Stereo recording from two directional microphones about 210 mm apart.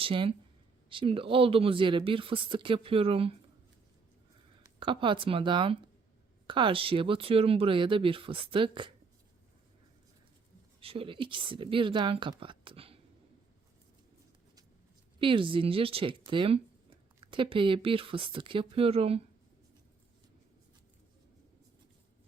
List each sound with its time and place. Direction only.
0.0 s speech: 25° right (ahead or behind)
4.8 s speech: 25° right (ahead or behind)
10.8 s speech: 25° right (ahead or behind)
15.2 s speech: 25° right (ahead or behind)